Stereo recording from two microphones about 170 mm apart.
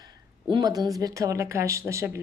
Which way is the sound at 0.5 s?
25° right (ahead or behind).